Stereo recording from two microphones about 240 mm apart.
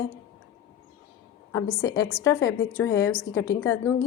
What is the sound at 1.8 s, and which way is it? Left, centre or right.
A woman's voice, centre.